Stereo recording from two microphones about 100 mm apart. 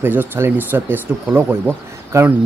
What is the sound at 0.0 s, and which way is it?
Speech, 20° right (ahead or behind).